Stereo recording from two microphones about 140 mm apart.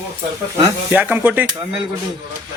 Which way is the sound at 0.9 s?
10° right (ahead or behind).